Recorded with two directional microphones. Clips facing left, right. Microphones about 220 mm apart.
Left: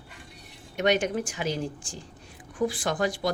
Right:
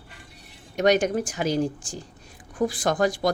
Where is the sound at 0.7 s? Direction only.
40° right (ahead or behind).